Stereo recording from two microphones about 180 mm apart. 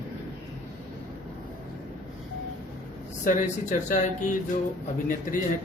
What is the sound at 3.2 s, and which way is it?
Speech, 45° left (ahead or behind).